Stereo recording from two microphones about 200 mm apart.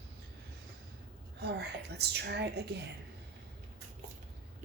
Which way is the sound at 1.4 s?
55° right (ahead or behind).